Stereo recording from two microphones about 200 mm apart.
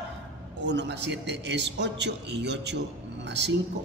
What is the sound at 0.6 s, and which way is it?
A man's voice, 60° right (ahead or behind).